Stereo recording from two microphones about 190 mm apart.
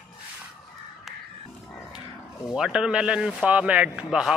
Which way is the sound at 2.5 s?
5° right (ahead or behind).